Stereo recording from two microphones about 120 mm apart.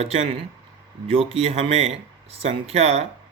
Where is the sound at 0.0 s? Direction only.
60° right (ahead or behind).